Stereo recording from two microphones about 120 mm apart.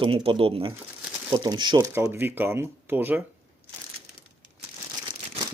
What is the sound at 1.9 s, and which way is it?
Speech, 20° right (ahead or behind).